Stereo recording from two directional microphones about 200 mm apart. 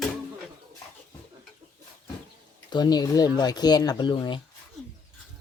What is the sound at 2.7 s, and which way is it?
Speech, 20° left (ahead or behind).